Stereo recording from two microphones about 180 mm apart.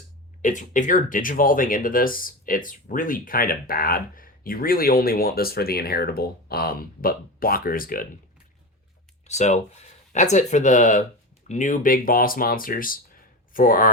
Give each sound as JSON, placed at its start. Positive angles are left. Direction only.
{"t": 0.4, "sound": "speech", "side_deg": 45}
{"t": 9.2, "sound": "speech", "side_deg": 40}